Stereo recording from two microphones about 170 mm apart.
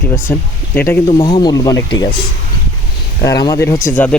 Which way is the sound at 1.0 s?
25° left (ahead or behind).